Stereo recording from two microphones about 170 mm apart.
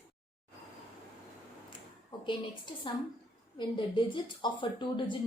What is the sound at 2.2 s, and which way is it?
Speech, 30° left (ahead or behind).